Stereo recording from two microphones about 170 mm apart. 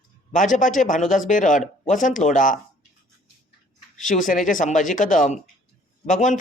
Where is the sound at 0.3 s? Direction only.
50° left (ahead or behind).